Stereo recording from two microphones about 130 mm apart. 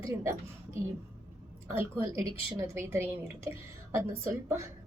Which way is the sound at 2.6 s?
20° right (ahead or behind).